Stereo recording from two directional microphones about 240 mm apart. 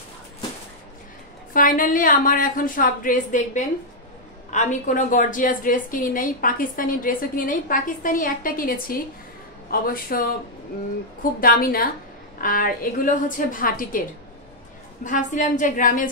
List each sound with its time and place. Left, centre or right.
1.5 s a woman's voice: left
11.4 s a woman's voice: left
15.0 s a woman's voice: left